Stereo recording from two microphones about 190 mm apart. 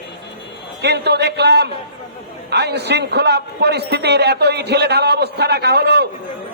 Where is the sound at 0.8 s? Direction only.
60° right (ahead or behind).